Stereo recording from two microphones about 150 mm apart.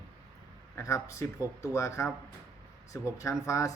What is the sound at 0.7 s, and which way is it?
Speech, 20° left (ahead or behind).